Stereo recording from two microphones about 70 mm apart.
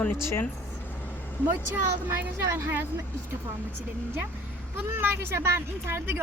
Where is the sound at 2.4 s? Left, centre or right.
Right.